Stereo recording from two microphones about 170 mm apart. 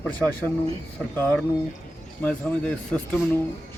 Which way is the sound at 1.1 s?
10° left (ahead or behind).